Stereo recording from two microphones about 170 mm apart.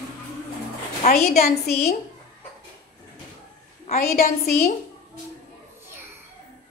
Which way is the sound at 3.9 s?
50° left (ahead or behind).